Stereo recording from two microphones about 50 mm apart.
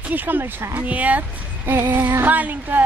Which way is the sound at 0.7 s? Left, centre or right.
Right.